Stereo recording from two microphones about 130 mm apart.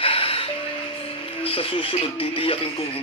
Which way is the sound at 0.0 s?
45° left (ahead or behind).